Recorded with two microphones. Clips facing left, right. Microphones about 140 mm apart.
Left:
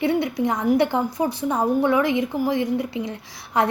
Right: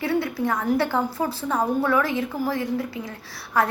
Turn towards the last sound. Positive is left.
turn(degrees=20)  # may be behind; listen again after turning